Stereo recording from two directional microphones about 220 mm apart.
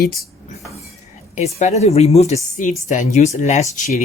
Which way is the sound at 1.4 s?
30° left (ahead or behind).